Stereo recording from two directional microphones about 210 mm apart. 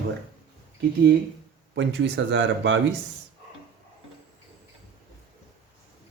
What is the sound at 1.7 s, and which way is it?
Speech, 55° right (ahead or behind).